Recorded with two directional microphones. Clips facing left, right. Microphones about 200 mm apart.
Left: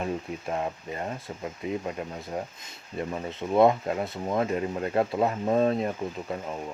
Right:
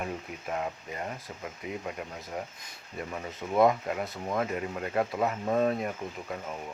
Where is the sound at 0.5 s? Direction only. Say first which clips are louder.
Left 2 dB; 30° left (ahead or behind).